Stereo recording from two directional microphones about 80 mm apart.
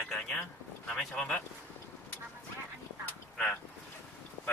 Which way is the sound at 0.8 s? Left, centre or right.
Centre.